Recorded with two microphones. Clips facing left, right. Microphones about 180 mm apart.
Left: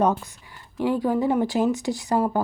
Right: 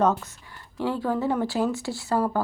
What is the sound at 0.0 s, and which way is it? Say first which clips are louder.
Speech: left 1 dB; 15° left (ahead or behind).